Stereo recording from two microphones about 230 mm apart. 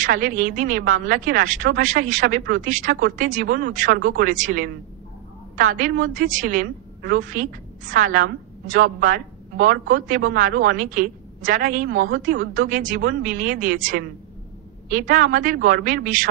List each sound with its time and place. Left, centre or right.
0.0 s a woman's voice: right